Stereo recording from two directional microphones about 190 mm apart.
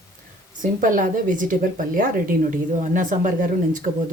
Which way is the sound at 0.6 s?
45° right (ahead or behind).